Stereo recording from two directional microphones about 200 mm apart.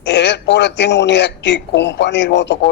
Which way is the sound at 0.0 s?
60° left (ahead or behind).